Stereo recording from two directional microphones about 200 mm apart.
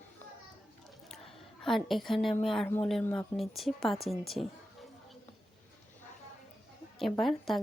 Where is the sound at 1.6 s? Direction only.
Centre (ahead or behind).